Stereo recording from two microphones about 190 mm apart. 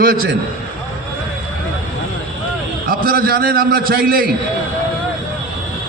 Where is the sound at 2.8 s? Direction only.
50° right (ahead or behind).